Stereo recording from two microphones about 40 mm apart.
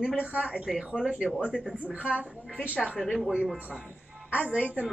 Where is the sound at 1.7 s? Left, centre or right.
Right.